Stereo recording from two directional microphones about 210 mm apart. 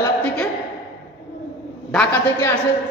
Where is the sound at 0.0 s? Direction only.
5° left (ahead or behind).